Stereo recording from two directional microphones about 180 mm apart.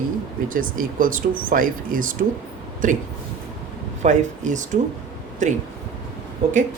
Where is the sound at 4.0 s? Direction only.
45° right (ahead or behind).